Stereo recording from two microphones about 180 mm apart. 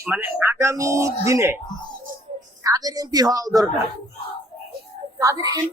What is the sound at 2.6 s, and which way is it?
A woman's voice, 20° right (ahead or behind).